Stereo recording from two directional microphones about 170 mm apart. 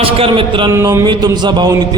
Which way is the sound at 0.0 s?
30° right (ahead or behind).